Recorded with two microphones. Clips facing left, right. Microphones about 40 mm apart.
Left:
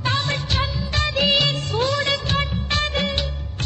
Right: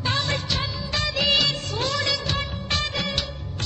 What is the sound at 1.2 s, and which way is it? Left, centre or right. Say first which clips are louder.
Music: left 2 dB; left.